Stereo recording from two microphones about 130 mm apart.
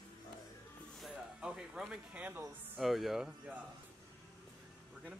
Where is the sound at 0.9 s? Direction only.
5° right (ahead or behind).